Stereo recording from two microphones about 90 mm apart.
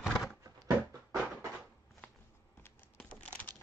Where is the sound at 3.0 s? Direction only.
15° left (ahead or behind).